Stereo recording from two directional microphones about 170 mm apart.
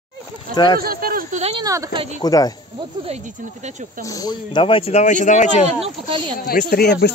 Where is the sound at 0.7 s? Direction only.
60° right (ahead or behind).